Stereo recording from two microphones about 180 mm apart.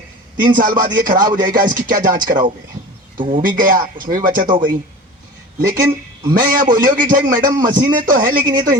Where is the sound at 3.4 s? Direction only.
50° right (ahead or behind).